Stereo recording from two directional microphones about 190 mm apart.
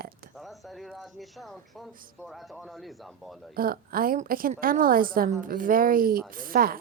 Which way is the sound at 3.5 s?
50° right (ahead or behind).